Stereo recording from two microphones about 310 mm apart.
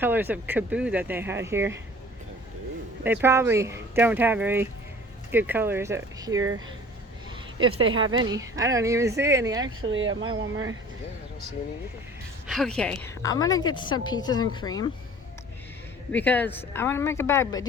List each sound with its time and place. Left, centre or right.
0.0 s speech: centre
3.0 s speech: centre
7.8 s speech: centre
9.9 s speech: right
12.5 s a woman's voice: centre
16.1 s a woman's voice: centre